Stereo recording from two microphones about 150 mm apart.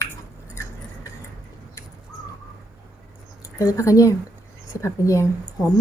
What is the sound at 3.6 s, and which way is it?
Speech, 20° left (ahead or behind).